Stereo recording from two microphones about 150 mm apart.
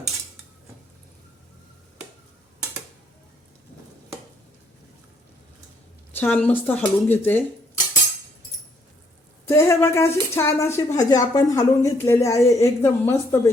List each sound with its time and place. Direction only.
6.1 s speech: 10° left (ahead or behind)
9.5 s a woman's voice: 15° left (ahead or behind)